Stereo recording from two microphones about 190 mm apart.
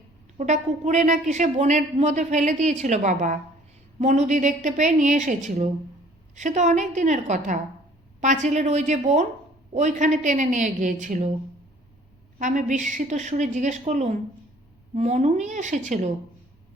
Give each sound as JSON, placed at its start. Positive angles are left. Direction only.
{"t": 0.3, "sound": "a woman's voice", "side_deg": -40}
{"t": 12.4, "sound": "a woman's voice", "side_deg": -40}